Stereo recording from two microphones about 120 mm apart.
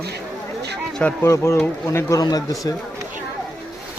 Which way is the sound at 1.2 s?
25° left (ahead or behind).